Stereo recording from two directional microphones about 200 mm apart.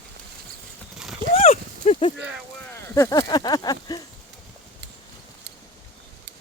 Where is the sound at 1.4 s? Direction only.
35° left (ahead or behind).